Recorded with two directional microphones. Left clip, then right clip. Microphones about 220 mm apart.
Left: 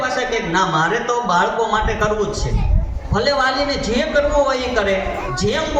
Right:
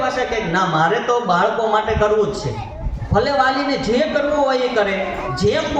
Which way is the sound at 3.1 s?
40° left (ahead or behind).